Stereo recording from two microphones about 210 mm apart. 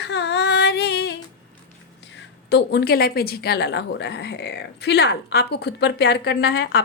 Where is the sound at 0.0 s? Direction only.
55° left (ahead or behind).